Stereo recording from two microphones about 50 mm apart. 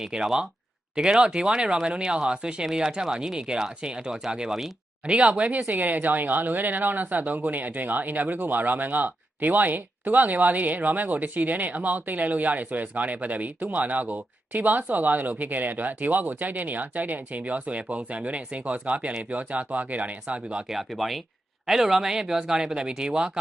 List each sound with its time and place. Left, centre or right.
0.0 s speech: centre
20.7 s speech: centre